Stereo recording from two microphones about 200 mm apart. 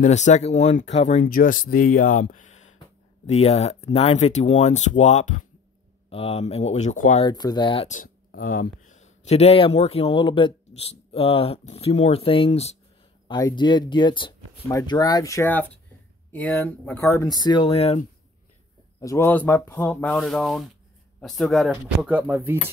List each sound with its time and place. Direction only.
0.0 s speech: 35° left (ahead or behind)
7.2 s speech: 20° left (ahead or behind)
8.3 s speech: 45° left (ahead or behind)
13.3 s speech: 20° left (ahead or behind)
18.9 s speech: 15° left (ahead or behind); by 22.6 s 10° right (ahead or behind)